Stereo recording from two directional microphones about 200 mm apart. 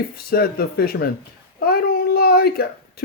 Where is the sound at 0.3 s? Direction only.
50° left (ahead or behind).